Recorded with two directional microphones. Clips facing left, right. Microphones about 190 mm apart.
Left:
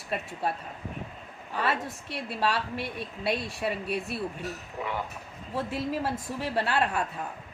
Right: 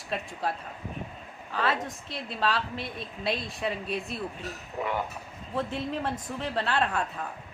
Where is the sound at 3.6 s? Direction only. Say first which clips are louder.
Left 1 dB; 5° left (ahead or behind).